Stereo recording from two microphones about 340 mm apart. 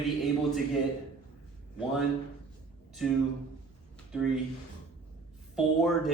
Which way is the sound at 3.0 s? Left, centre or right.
Centre.